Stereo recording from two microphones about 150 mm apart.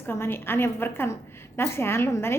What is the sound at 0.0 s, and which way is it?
A woman's voice, 15° left (ahead or behind).